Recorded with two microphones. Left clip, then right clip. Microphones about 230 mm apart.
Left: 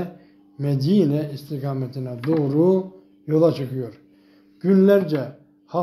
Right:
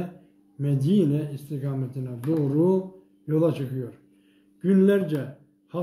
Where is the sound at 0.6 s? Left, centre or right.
Centre.